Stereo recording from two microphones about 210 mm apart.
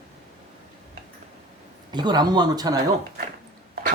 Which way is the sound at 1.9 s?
20° right (ahead or behind).